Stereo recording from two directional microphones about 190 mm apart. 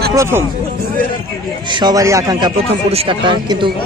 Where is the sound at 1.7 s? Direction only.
20° right (ahead or behind).